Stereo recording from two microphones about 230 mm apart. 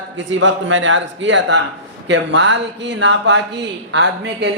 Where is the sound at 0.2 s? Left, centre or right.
Right.